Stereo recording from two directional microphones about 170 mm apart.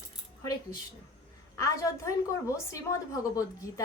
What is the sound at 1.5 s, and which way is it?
Speech, 20° left (ahead or behind).